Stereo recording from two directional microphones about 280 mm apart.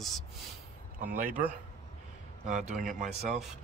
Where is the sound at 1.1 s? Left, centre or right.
Right.